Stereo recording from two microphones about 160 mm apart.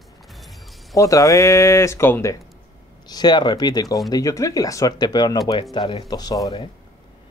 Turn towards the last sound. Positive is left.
turn(degrees=25)  # may be behind; listen again after turning